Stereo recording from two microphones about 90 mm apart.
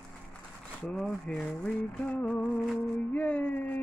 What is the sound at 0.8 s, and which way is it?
Speech, 5° left (ahead or behind).